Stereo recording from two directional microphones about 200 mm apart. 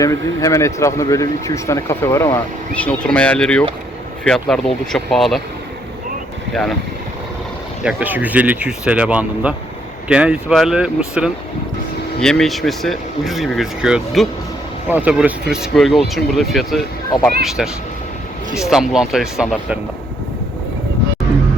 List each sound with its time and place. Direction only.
0.0 s speech: 15° left (ahead or behind)
6.5 s speech: centre (ahead or behind)
7.9 s speech: 10° right (ahead or behind)